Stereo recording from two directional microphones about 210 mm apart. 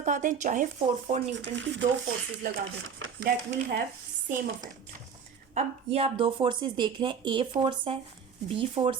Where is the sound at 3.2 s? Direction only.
50° right (ahead or behind).